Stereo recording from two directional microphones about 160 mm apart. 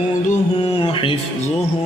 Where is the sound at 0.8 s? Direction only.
35° left (ahead or behind).